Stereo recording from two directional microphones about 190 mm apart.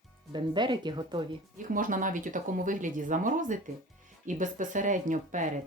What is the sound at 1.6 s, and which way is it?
Speech, 45° right (ahead or behind).